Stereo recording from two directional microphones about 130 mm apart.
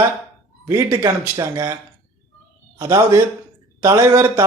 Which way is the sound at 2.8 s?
25° right (ahead or behind).